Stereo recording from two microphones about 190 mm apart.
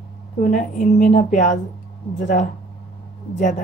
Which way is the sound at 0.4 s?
40° left (ahead or behind).